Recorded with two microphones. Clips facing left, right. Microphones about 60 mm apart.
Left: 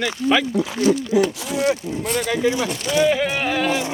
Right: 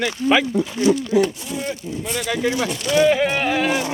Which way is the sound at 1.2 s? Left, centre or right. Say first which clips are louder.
Left 1 dB; left.